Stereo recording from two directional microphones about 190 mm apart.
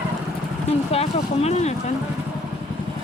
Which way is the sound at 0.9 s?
35° left (ahead or behind).